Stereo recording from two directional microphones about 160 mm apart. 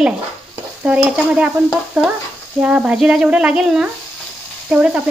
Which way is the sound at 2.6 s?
5° right (ahead or behind).